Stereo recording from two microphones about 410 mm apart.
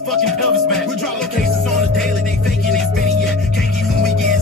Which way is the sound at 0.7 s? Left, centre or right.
Centre.